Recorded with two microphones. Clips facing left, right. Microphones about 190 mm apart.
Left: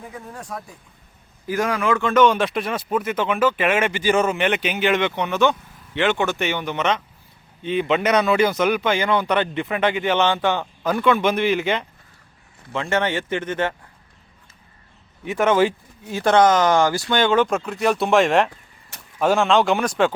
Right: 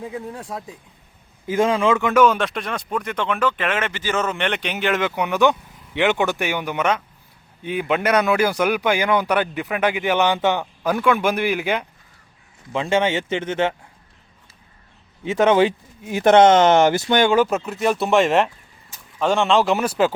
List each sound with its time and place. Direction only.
0.4 s speech: 20° right (ahead or behind)
2.2 s speech: centre (ahead or behind)
13.3 s speech: 25° right (ahead or behind)
15.2 s speech: 20° right (ahead or behind); by 20.1 s 5° right (ahead or behind)